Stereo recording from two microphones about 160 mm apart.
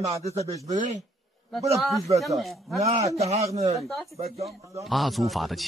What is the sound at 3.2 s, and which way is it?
Speech, 40° right (ahead or behind).